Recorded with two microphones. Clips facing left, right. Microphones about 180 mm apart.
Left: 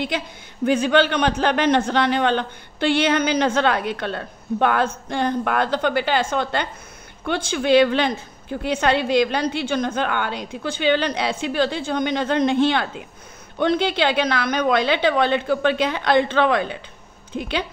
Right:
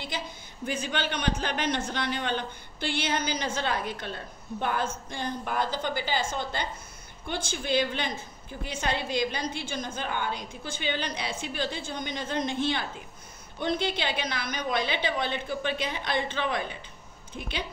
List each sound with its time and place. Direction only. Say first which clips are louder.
0.7 s a man's voice: left 13 dB; 80° left
7.2 s a woman's voice: left 11 dB; 90° left